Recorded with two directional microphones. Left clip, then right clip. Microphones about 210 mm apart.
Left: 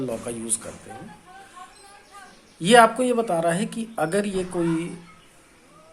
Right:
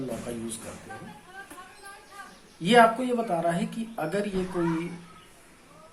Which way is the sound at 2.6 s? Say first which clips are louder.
Left 4 dB; 50° left (ahead or behind).